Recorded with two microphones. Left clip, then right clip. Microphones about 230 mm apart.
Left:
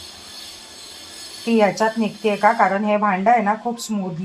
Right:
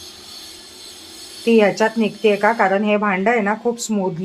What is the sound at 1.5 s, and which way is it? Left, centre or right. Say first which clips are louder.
A woman's voice: right 3 dB; centre.